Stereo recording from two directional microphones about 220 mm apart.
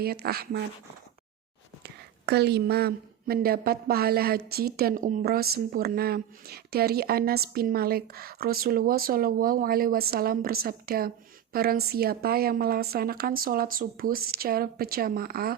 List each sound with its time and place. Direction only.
0.0 s a woman's voice: 45° right (ahead or behind)
1.8 s a woman's voice: 50° right (ahead or behind)